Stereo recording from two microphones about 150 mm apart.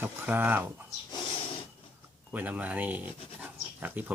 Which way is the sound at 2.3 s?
10° right (ahead or behind).